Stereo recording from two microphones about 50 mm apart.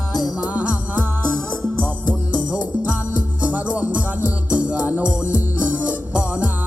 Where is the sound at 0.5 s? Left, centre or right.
Right.